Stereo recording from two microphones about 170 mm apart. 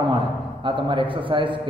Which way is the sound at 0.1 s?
30° right (ahead or behind).